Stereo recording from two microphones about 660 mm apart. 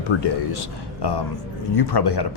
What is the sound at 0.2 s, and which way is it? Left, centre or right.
Speech, left.